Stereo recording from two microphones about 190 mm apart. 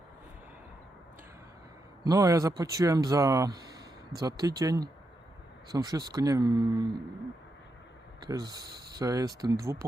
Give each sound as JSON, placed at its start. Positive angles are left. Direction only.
{"t": 2.0, "sound": "speech", "side_deg": -15}
{"t": 8.2, "sound": "speech", "side_deg": -20}